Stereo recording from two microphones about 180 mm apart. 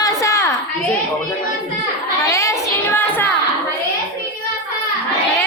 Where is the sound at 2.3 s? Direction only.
15° left (ahead or behind).